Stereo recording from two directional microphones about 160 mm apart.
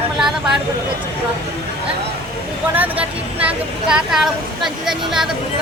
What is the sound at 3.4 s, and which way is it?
Speech, 5° right (ahead or behind).